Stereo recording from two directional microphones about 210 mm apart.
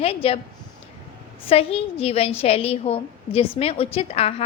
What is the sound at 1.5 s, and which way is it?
A woman's voice, 25° left (ahead or behind).